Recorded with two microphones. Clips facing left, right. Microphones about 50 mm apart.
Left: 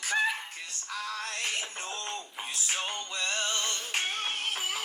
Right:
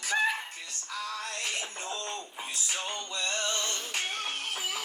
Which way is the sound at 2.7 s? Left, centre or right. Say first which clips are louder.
Left 2 dB; left.